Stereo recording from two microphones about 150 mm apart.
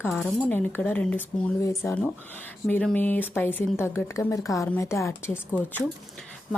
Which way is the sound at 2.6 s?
5° left (ahead or behind).